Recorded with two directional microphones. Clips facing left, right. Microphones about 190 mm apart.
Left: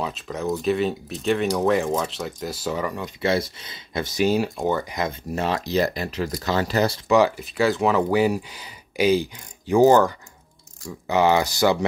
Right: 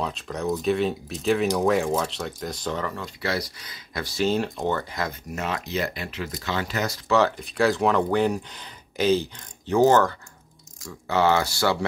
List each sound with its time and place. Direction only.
0.0 s speech: centre (ahead or behind)
5.3 s speech: 35° left (ahead or behind)
7.1 s speech: 10° left (ahead or behind)